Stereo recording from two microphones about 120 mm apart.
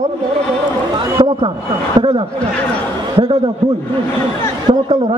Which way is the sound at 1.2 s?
45° right (ahead or behind).